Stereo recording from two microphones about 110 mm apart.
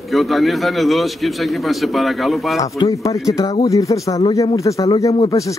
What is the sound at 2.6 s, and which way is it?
Speech, 30° left (ahead or behind).